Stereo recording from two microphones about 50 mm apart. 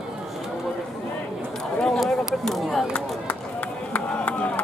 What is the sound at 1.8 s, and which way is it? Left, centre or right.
Speech, centre.